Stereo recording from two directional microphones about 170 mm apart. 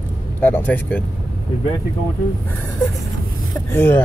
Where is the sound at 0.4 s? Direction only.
10° left (ahead or behind).